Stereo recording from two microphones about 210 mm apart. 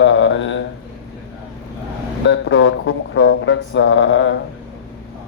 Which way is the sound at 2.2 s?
60° left (ahead or behind).